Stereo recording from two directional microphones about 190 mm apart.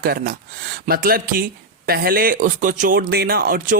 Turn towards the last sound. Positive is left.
turn(degrees=-45)  # may be behind; listen again after turning